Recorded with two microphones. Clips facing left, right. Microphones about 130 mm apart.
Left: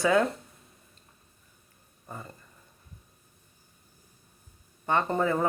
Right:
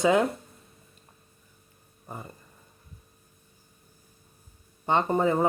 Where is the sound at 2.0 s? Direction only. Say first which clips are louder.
Right 2 dB; 20° right (ahead or behind).